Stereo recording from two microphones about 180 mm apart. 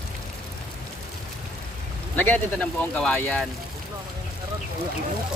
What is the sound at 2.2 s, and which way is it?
Speech, 10° left (ahead or behind).